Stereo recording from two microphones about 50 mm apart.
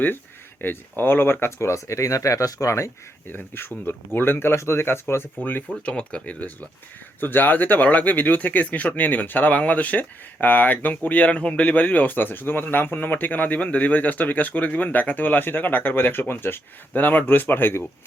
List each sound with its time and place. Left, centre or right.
0.6 s speech: left
1.5 s speech: left
3.2 s speech: left
5.4 s speech: left
5.8 s speech: left
7.2 s speech: left